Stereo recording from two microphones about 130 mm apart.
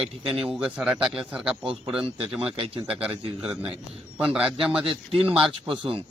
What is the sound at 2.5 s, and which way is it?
Speech, 45° right (ahead or behind).